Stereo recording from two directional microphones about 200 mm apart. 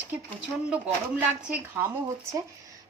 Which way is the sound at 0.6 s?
5° right (ahead or behind).